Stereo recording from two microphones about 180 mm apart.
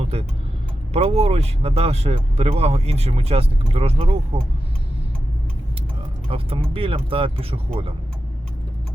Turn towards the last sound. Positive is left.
turn(degrees=-30)  # may be behind; listen again after turning